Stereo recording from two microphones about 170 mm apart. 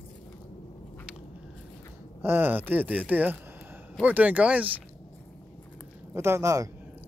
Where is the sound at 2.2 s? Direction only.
10° right (ahead or behind).